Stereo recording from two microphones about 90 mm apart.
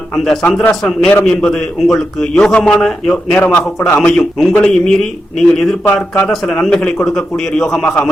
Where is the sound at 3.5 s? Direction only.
20° left (ahead or behind).